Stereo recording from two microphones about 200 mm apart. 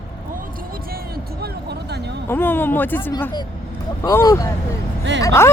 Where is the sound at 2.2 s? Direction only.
10° left (ahead or behind).